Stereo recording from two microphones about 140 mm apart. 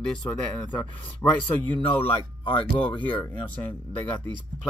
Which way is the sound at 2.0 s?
40° left (ahead or behind).